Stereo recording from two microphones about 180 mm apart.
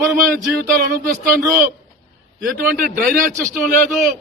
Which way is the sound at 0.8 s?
55° right (ahead or behind).